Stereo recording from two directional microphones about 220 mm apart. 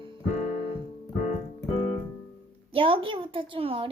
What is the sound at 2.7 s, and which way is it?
A woman's voice, 25° right (ahead or behind).